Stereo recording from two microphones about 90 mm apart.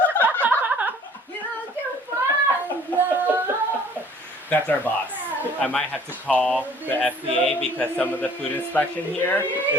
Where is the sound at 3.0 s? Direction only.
20° right (ahead or behind).